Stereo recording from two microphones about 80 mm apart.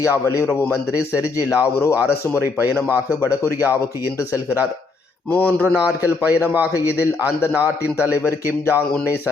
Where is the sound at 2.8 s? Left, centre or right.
Right.